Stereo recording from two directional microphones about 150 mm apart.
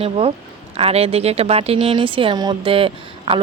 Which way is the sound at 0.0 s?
40° right (ahead or behind).